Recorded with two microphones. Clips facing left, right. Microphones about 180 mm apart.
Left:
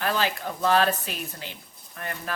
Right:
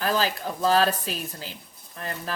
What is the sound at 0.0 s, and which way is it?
Speech, 35° right (ahead or behind).